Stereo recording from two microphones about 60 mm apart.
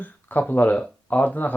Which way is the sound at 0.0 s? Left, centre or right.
Left.